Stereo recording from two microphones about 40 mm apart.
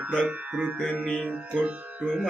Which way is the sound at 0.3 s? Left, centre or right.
Right.